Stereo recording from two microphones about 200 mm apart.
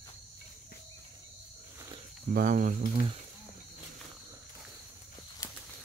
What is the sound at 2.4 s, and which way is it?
Speech, 40° right (ahead or behind).